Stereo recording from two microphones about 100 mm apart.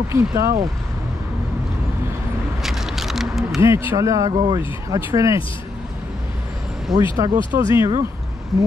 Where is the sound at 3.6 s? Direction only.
25° right (ahead or behind).